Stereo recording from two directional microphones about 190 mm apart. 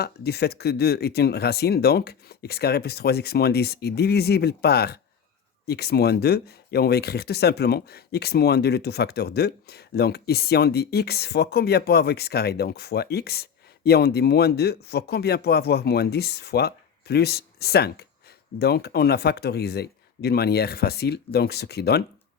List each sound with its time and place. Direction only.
0.0 s speech: 60° left (ahead or behind)